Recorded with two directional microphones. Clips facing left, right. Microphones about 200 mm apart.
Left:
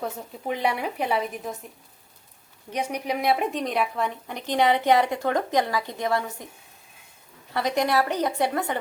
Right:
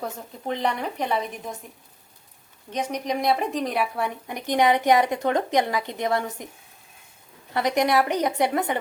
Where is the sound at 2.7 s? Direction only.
10° left (ahead or behind); by 6.5 s 20° right (ahead or behind).